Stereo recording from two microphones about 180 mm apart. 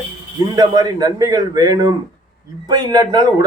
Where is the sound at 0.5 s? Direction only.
20° right (ahead or behind).